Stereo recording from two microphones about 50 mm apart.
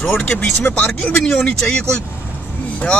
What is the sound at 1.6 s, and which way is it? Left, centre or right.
Speech, centre.